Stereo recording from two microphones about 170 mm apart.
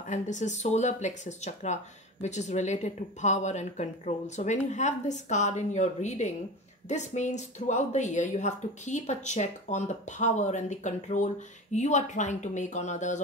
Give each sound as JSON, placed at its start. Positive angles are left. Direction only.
{"t": 0.0, "sound": "speech", "side_deg": 45}